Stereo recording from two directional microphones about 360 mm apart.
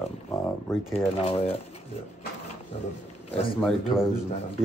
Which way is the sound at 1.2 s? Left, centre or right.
Centre.